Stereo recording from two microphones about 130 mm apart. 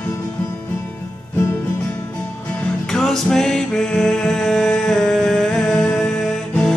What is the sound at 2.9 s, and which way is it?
Music, 5° left (ahead or behind).